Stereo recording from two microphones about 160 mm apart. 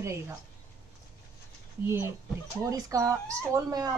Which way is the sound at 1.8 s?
15° right (ahead or behind).